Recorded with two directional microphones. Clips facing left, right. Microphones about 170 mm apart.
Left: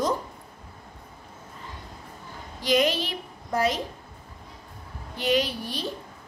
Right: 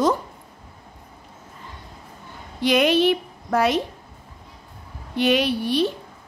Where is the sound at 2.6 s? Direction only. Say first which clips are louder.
Right 5 dB; 65° right (ahead or behind).